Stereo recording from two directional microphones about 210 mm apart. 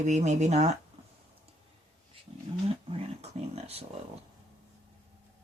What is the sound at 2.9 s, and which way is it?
Speech, 30° right (ahead or behind).